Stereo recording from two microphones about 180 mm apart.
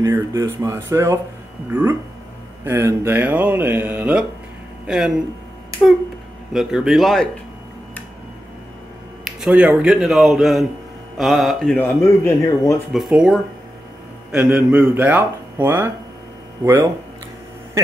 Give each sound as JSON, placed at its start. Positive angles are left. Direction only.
{"t": 0.0, "sound": "speech", "side_deg": -15}
{"t": 6.5, "sound": "speech", "side_deg": -5}
{"t": 9.2, "sound": "speech", "side_deg": -5}
{"t": 11.8, "sound": "speech", "side_deg": 15}
{"t": 12.9, "sound": "speech", "side_deg": -5}